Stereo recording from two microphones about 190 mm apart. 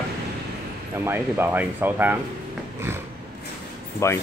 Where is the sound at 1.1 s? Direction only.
10° right (ahead or behind).